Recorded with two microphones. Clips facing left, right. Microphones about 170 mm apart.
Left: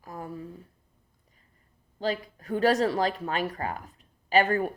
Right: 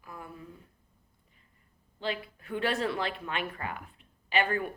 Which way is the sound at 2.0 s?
40° left (ahead or behind).